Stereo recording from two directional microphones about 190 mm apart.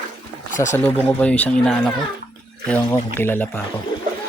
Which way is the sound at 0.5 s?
40° left (ahead or behind).